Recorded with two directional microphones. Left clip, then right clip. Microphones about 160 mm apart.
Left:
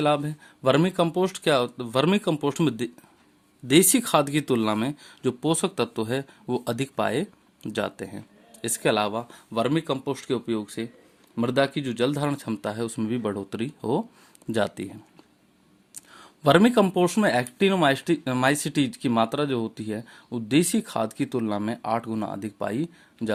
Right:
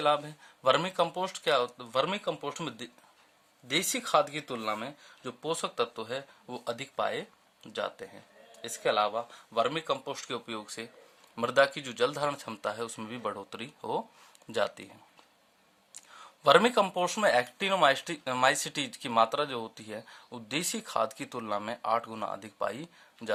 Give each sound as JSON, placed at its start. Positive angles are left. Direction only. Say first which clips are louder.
{"t": 0.0, "sound": "speech", "louder": "left 4 dB", "side_deg": 30}
{"t": 16.0, "sound": "speech", "louder": "left 3 dB", "side_deg": 25}